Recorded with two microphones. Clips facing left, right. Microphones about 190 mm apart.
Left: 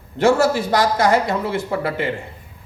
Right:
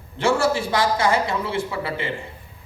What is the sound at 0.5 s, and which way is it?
A woman's voice, 50° left (ahead or behind).